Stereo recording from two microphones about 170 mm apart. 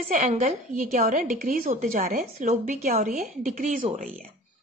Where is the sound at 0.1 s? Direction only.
50° right (ahead or behind).